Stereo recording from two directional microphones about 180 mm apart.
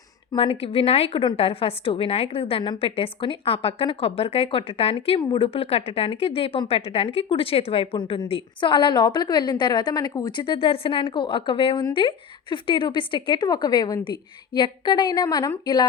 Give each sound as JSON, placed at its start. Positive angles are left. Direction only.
{"t": 0.3, "sound": "a woman's voice", "side_deg": 30}